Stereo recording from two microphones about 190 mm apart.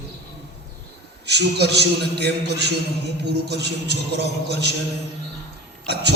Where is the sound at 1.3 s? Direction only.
60° right (ahead or behind).